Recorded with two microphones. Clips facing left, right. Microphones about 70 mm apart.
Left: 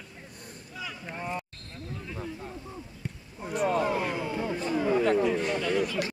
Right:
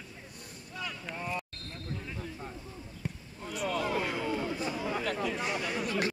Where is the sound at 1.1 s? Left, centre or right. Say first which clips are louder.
Left 3 dB; left.